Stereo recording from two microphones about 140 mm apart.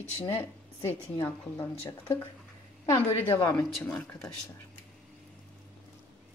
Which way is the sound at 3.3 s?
15° left (ahead or behind).